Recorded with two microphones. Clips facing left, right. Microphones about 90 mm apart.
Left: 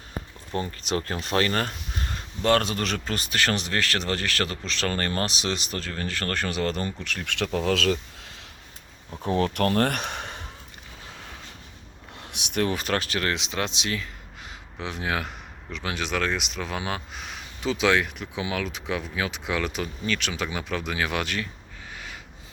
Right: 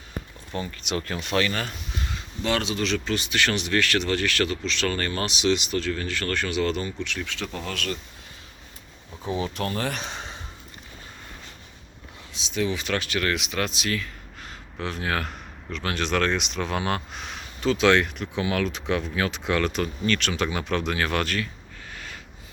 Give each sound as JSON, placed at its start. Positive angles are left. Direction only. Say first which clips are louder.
{"t": 0.5, "sound": "speech", "louder": "left 2 dB", "side_deg": 35}
{"t": 7.3, "sound": "speech", "louder": "left 7 dB", "side_deg": 80}
{"t": 9.2, "sound": "speech", "louder": "left 4 dB", "side_deg": 60}
{"t": 12.2, "sound": "a man's voice", "louder": "left 1 dB", "side_deg": 65}
{"t": 21.9, "sound": "a sound", "louder": "even", "side_deg": 15}